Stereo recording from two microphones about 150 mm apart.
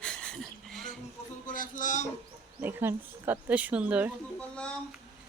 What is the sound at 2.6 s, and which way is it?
Speech, 15° right (ahead or behind).